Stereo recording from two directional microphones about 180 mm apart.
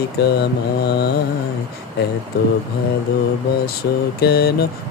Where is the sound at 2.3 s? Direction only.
60° left (ahead or behind).